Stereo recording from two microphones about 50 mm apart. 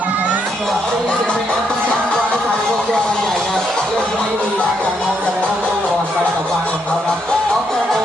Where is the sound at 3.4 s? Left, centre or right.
Centre.